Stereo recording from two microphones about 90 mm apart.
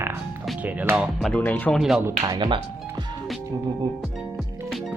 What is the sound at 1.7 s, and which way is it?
Speech, centre (ahead or behind).